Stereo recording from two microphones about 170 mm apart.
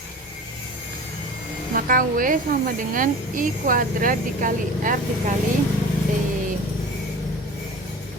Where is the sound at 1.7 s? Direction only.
55° right (ahead or behind).